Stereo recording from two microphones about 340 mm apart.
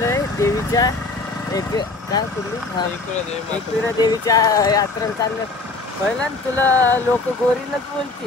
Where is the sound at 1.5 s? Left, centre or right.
Centre.